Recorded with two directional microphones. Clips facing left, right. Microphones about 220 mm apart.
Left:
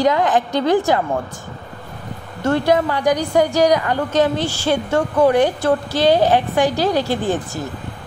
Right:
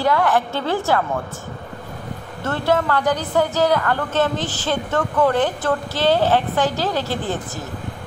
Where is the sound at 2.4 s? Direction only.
15° left (ahead or behind).